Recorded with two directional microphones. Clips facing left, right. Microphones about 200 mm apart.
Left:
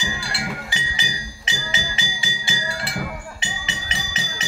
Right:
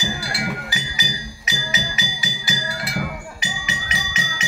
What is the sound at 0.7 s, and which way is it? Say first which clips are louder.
Music: right 2 dB; 25° left (ahead or behind).